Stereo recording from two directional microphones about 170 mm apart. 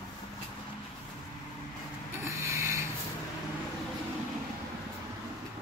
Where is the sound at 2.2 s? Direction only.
15° right (ahead or behind).